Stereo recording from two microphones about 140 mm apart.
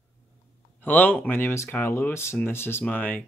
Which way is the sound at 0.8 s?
15° left (ahead or behind).